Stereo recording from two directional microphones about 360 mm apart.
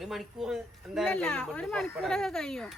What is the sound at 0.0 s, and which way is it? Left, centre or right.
Speech, centre.